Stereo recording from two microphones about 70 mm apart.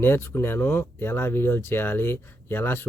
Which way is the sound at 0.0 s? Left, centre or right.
Left.